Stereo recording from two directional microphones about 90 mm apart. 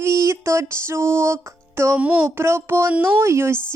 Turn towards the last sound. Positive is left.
turn(degrees=-30)  # may be behind; listen again after turning